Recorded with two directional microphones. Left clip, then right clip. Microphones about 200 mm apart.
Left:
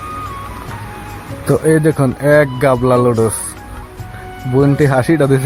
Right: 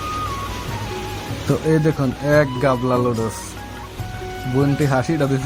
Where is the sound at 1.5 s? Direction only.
35° left (ahead or behind).